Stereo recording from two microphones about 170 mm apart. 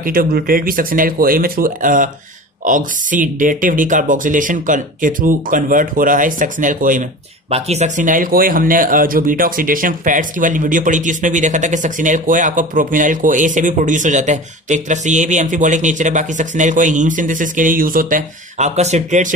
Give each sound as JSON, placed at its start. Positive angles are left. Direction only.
{"t": 0.0, "sound": "speech", "side_deg": -55}